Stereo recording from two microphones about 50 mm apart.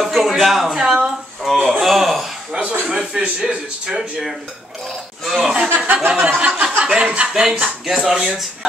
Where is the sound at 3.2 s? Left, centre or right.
Centre.